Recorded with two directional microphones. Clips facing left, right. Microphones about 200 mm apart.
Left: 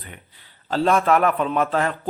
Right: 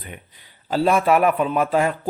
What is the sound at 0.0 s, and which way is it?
A man's voice, 15° right (ahead or behind).